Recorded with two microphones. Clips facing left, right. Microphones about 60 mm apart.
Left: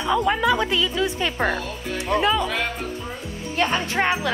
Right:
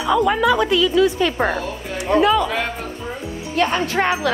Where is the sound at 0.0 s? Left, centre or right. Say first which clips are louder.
Right 4 dB; right.